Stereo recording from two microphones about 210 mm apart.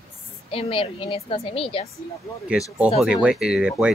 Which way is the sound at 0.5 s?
25° left (ahead or behind).